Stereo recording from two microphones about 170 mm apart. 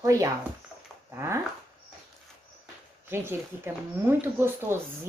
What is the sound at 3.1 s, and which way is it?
A woman's voice, 15° right (ahead or behind).